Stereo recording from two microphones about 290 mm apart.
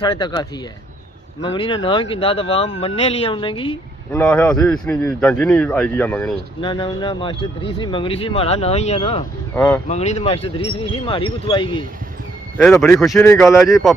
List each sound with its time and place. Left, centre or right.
0.0 s speech: centre
4.2 s speech: centre
6.6 s speech: centre
9.9 s speech: left
12.5 s speech: centre